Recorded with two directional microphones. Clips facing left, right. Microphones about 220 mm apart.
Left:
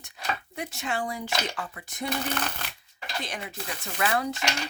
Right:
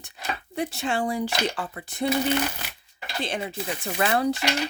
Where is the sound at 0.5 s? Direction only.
30° right (ahead or behind).